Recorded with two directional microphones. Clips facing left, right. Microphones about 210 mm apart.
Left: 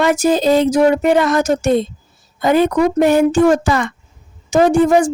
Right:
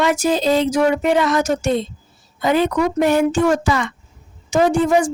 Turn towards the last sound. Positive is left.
turn(degrees=40)  # may be behind; listen again after turning